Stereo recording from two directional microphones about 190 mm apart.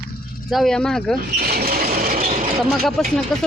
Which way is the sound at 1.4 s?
55° right (ahead or behind).